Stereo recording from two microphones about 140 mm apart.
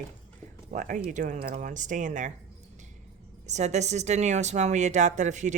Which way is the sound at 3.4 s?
55° right (ahead or behind).